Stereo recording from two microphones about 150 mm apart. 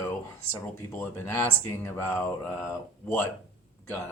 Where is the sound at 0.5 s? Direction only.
15° left (ahead or behind).